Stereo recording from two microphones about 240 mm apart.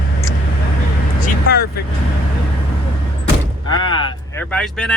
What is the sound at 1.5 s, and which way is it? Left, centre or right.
Vehicle, left.